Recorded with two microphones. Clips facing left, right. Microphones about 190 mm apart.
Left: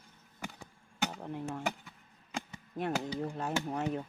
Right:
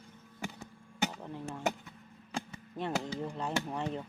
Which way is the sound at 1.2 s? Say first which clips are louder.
Left 3 dB; 15° left (ahead or behind).